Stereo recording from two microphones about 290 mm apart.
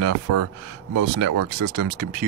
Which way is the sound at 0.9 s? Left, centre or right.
Right.